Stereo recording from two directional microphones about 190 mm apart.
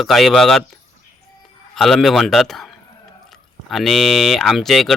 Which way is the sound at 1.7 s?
Centre (ahead or behind).